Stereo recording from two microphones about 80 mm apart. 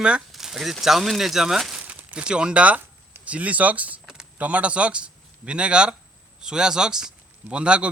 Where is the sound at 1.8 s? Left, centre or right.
Right.